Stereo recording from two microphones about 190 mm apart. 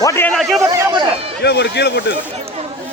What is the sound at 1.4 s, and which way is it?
Speech, 65° left (ahead or behind).